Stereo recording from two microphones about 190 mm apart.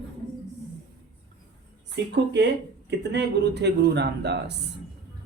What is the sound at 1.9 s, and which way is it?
Speech, 65° right (ahead or behind).